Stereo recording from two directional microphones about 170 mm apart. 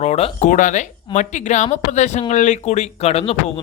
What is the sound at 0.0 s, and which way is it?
Speech, 40° left (ahead or behind).